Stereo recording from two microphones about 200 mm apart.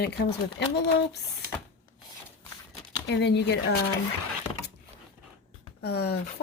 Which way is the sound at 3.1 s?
60° left (ahead or behind).